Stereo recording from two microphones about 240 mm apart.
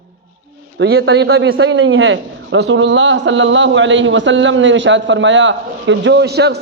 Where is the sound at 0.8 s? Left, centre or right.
Right.